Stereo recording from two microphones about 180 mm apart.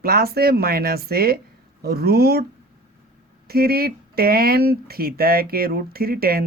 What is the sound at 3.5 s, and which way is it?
Speech, 60° right (ahead or behind).